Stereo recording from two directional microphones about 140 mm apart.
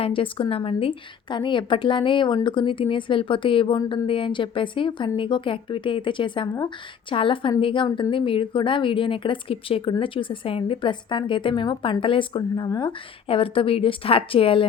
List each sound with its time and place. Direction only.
0.0 s a woman's voice: 40° left (ahead or behind)